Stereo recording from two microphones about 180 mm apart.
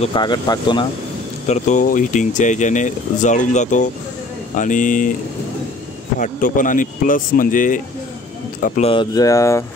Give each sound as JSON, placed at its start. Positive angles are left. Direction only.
{"t": 0.0, "sound": "speech", "side_deg": 25}
{"t": 1.5, "sound": "speech", "side_deg": 45}
{"t": 6.1, "sound": "speech", "side_deg": 45}
{"t": 8.8, "sound": "speech", "side_deg": 25}